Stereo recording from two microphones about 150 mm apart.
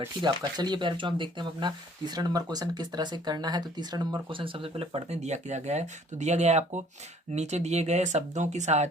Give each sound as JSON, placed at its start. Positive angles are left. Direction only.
{"t": 0.0, "sound": "speech", "side_deg": -30}